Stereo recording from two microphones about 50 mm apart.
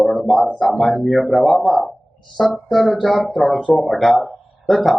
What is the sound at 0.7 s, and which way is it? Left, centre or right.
Speech, centre.